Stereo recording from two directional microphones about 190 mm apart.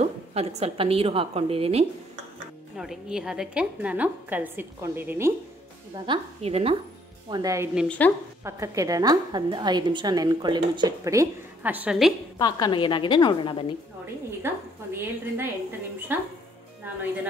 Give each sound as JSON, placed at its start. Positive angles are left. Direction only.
{"t": 0.0, "sound": "a woman's voice", "side_deg": -35}
{"t": 2.8, "sound": "a woman's voice", "side_deg": -5}
{"t": 6.0, "sound": "a woman's voice", "side_deg": -30}
{"t": 7.2, "sound": "a woman's voice", "side_deg": -20}
{"t": 12.4, "sound": "a woman's voice", "side_deg": 20}
{"t": 14.4, "sound": "a woman's voice", "side_deg": -10}